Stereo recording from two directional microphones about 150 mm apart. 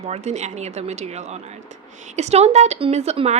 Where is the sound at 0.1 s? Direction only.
50° right (ahead or behind).